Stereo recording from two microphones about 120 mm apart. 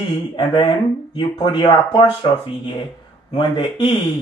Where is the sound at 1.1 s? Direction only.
40° left (ahead or behind).